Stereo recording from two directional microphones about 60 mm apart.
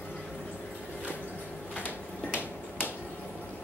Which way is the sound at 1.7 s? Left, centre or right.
Left.